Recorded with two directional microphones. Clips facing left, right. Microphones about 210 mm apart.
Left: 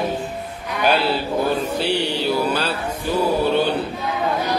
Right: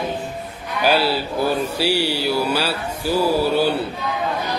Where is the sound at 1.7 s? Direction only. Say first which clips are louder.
Right 1 dB; 5° right (ahead or behind).